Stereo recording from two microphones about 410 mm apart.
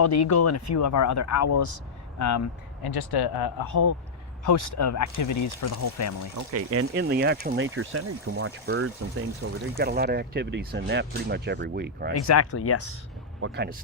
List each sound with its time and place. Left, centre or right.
0.0 s speech: left
2.8 s speech: left
6.5 s speech: right
12.2 s speech: left
13.4 s speech: right